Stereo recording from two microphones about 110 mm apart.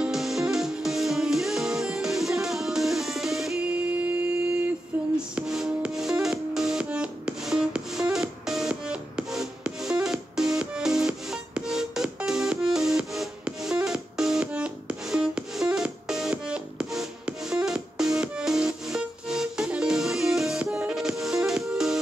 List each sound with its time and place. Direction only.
0.0 s music: centre (ahead or behind)